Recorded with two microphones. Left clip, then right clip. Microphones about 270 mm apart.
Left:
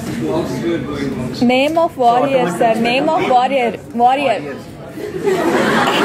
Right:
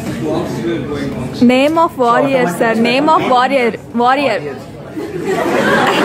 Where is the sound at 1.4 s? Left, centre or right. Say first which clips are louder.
Right 3 dB; centre.